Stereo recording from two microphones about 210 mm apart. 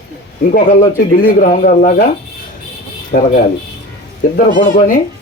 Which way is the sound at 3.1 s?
45° left (ahead or behind).